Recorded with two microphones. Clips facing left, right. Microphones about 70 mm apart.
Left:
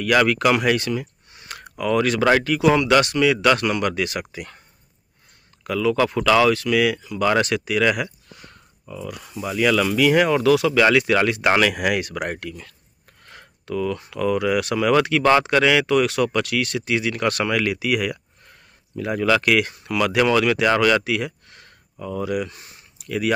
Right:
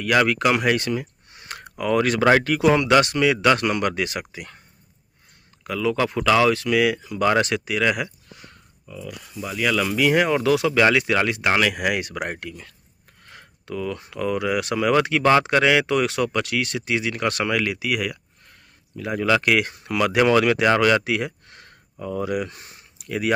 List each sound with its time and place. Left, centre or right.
0.0 s speech: centre
0.7 s speech: right
4.1 s speech: centre
5.6 s speech: centre
7.0 s speech: right
7.2 s speech: right
8.8 s speech: centre
9.6 s speech: centre
9.9 s speech: centre
19.2 s speech: centre